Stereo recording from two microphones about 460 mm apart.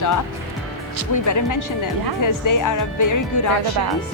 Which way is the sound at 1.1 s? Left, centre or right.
Left.